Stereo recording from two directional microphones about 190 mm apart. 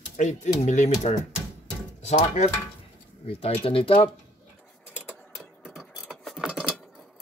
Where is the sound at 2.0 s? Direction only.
35° left (ahead or behind).